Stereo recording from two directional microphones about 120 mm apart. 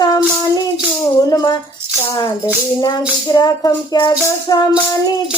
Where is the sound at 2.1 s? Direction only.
25° left (ahead or behind).